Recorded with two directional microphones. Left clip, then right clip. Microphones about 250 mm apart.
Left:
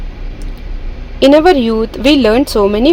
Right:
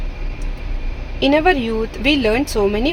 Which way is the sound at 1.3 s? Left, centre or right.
Left.